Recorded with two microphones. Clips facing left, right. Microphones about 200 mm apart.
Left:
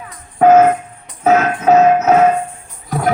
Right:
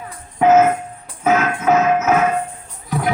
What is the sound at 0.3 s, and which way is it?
Music, 55° left (ahead or behind).